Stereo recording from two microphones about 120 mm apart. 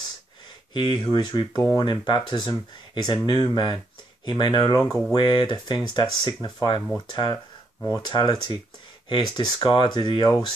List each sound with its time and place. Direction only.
0.7 s speech: 40° left (ahead or behind)